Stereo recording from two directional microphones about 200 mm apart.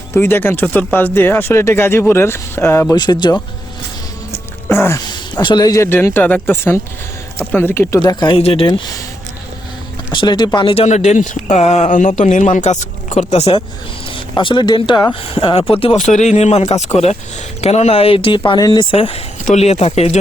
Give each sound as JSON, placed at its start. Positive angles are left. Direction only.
{"t": 0.1, "sound": "speech", "side_deg": 10}
{"t": 10.1, "sound": "speech", "side_deg": 20}